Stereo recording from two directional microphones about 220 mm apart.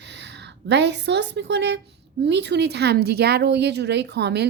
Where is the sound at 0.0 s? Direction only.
50° right (ahead or behind).